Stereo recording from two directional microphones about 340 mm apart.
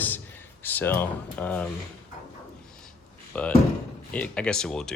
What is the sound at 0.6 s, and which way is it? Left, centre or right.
Speech, centre.